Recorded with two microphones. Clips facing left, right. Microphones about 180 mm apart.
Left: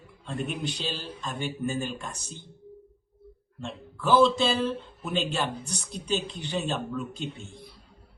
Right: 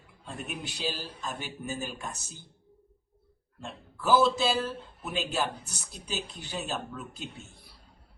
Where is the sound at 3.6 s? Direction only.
5° right (ahead or behind).